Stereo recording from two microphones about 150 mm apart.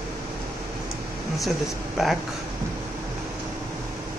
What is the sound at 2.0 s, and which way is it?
Speech, centre (ahead or behind).